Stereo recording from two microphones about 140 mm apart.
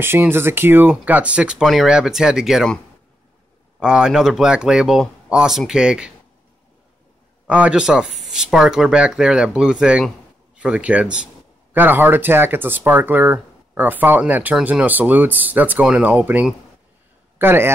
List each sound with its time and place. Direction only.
0.0 s speech: 15° right (ahead or behind); by 2.8 s centre (ahead or behind)
3.8 s speech: 5° right (ahead or behind)
7.4 s speech: 10° right (ahead or behind)